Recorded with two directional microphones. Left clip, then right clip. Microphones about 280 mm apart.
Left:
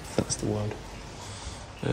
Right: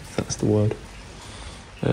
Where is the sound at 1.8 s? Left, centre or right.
Centre.